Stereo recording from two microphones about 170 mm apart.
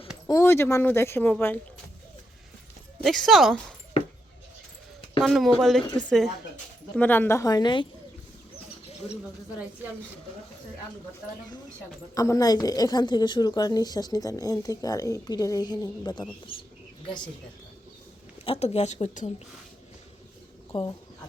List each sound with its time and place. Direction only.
0.3 s speech: 15° left (ahead or behind)
3.0 s speech: centre (ahead or behind)
5.2 s speech: centre (ahead or behind); by 7.9 s 25° left (ahead or behind)
12.1 s a woman's voice: 20° left (ahead or behind)
18.4 s speech: 35° left (ahead or behind)
20.7 s a woman's voice: 30° left (ahead or behind)